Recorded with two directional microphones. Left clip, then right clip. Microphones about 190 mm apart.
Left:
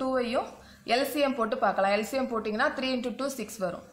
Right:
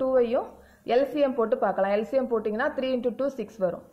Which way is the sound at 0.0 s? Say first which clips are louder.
Right 5 dB; 40° right (ahead or behind).